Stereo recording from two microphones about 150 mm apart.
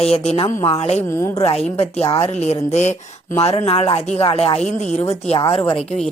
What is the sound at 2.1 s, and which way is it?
Speech, 45° left (ahead or behind).